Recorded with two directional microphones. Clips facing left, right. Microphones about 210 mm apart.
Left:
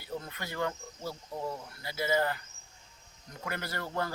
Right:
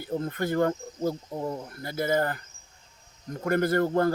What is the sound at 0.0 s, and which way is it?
Speech, 50° right (ahead or behind).